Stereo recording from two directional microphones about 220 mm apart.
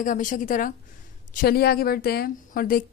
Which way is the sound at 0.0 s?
35° left (ahead or behind).